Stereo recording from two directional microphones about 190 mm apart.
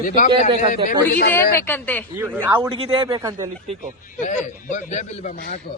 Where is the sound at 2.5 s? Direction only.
25° right (ahead or behind).